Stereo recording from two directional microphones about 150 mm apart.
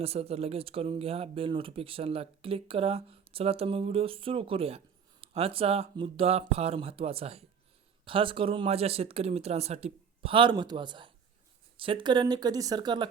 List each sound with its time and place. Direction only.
0.0 s speech: 40° right (ahead or behind)